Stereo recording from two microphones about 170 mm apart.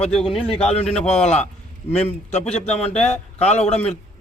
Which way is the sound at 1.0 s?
5° left (ahead or behind).